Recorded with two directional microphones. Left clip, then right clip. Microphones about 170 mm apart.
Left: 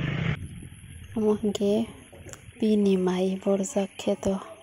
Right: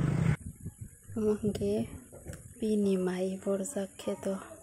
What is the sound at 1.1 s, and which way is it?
Speech, 10° left (ahead or behind).